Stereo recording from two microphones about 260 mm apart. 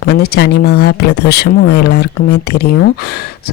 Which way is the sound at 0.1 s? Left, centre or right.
Left.